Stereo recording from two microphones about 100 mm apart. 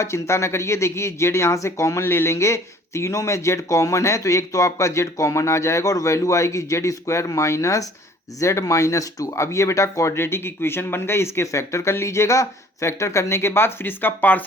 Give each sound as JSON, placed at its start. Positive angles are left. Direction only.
{"t": 0.0, "sound": "speech", "side_deg": 30}